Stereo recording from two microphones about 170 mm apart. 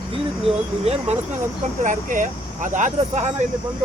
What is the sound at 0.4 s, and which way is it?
Speech, 40° right (ahead or behind).